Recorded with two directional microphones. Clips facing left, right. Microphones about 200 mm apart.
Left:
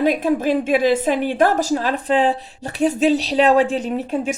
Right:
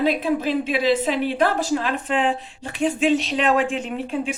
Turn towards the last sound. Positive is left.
turn(degrees=45)  # may be behind; listen again after turning